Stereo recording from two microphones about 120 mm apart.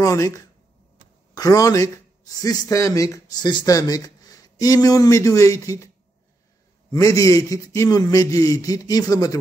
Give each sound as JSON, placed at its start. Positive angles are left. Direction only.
{"t": 0.0, "sound": "a man's voice", "side_deg": 25}
{"t": 6.9, "sound": "a man's voice", "side_deg": 30}